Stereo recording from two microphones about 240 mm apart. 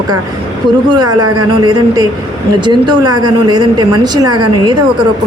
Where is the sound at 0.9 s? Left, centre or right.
Centre.